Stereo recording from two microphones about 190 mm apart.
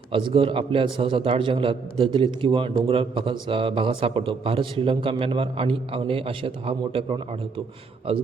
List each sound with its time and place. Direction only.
0.1 s a man's voice: 25° right (ahead or behind)